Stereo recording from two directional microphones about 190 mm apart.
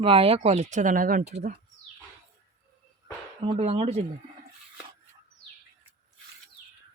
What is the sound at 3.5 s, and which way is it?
Speech, 30° right (ahead or behind).